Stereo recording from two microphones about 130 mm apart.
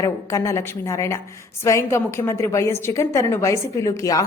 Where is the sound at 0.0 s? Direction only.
25° left (ahead or behind).